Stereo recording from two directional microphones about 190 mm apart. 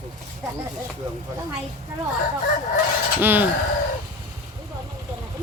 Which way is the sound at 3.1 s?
10° right (ahead or behind).